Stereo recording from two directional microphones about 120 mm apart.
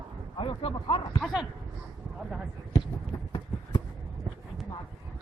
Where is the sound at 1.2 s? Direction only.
Centre (ahead or behind).